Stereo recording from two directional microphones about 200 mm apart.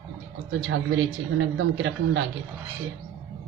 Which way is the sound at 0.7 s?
70° right (ahead or behind).